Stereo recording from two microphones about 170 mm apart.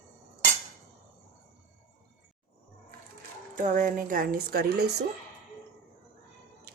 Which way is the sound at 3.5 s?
50° right (ahead or behind).